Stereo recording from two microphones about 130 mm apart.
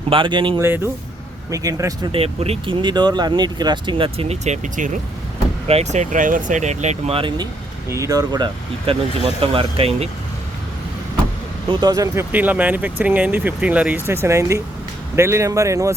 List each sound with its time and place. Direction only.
0.1 s speech: 40° right (ahead or behind)
1.5 s speech: 25° right (ahead or behind)
2.1 s speech: 50° right (ahead or behind)
2.8 s speech: 35° right (ahead or behind); by 4.9 s 65° right (ahead or behind)
5.6 s speech: 55° right (ahead or behind)
7.2 s speech: 35° right (ahead or behind)
7.9 s speech: 25° right (ahead or behind)
8.9 s speech: 50° right (ahead or behind)
11.7 s speech: 35° right (ahead or behind)
12.3 s speech: 10° right (ahead or behind)